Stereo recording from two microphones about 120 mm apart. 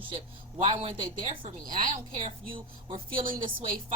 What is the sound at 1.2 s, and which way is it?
A woman's voice, 45° right (ahead or behind).